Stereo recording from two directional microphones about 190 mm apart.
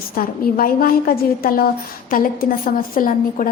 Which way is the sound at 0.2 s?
50° left (ahead or behind).